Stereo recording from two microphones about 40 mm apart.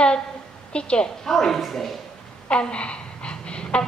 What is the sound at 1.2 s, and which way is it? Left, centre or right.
Speech, centre.